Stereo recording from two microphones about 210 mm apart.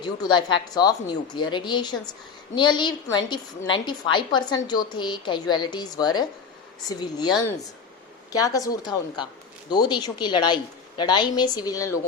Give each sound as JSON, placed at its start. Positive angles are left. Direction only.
{"t": 0.0, "sound": "a woman's voice", "side_deg": 20}